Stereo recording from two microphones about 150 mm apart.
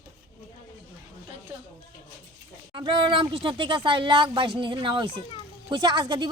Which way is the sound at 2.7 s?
35° right (ahead or behind).